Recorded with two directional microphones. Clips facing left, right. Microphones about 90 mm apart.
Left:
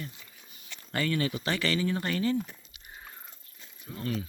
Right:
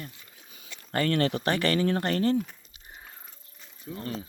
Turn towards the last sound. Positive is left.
turn(degrees=-30)  # may be behind; listen again after turning